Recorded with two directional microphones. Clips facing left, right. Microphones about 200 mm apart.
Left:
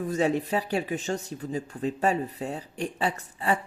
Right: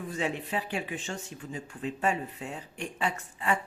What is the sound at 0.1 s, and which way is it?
Speech, 40° left (ahead or behind).